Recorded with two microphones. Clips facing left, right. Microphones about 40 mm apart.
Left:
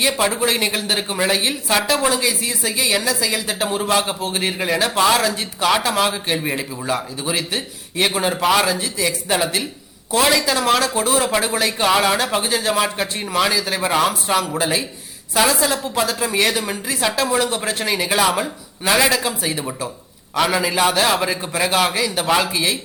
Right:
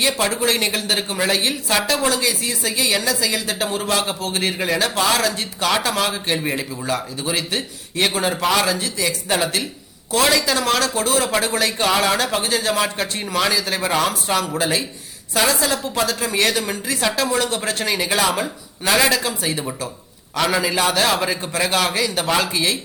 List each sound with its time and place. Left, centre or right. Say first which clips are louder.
0.2 s speech: left 1 dB; centre